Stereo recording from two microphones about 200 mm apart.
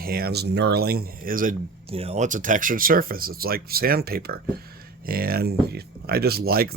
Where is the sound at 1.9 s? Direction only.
30° right (ahead or behind).